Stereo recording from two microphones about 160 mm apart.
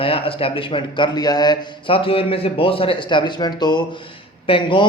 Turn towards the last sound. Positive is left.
turn(degrees=30)  # may be behind; listen again after turning